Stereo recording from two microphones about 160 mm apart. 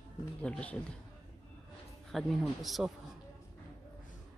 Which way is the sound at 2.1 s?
Centre (ahead or behind).